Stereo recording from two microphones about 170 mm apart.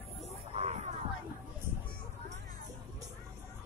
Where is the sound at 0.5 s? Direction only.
40° right (ahead or behind).